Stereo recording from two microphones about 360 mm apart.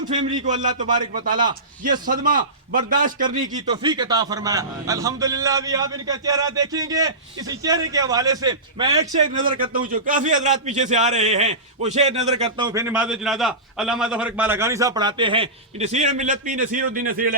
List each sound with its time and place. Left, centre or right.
0.3 s a man's voice: centre
3.4 s a man's voice: centre